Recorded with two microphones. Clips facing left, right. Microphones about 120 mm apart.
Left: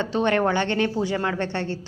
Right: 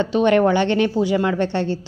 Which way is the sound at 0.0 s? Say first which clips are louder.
Right 6 dB; 20° right (ahead or behind).